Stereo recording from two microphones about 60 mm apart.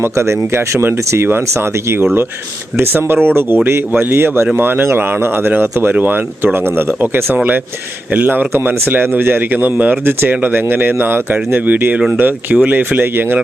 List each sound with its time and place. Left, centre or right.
0.0 s speech: right